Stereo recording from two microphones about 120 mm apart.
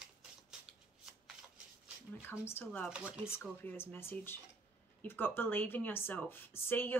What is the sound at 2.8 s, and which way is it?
Speech, 10° right (ahead or behind).